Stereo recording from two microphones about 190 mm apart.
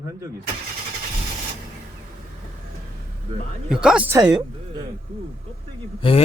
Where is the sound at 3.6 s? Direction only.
5° right (ahead or behind).